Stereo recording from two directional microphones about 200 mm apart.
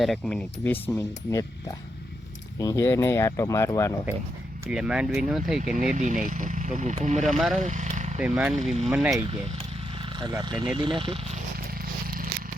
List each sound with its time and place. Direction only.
0.0 s speech: centre (ahead or behind)
4.7 s speech: 5° right (ahead or behind)
5.9 s speech: 35° right (ahead or behind)
7.3 s speech: centre (ahead or behind)
7.6 s vehicle: 40° right (ahead or behind)
8.2 s speech: 5° right (ahead or behind)
10.2 s speech: 20° right (ahead or behind)